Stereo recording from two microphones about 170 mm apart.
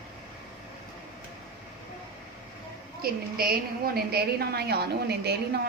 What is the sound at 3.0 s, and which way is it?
A woman's voice, 60° right (ahead or behind).